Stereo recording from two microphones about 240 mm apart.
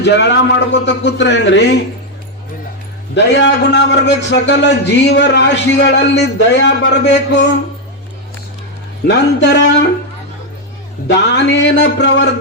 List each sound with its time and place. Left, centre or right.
0.0 s a man's voice: left
3.2 s a man's voice: left
9.0 s a man's voice: left
11.1 s a man's voice: left